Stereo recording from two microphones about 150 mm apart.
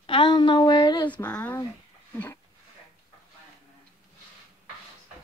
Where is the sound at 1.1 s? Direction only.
10° left (ahead or behind).